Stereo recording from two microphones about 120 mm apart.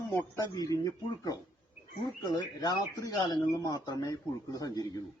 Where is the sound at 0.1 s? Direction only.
25° left (ahead or behind).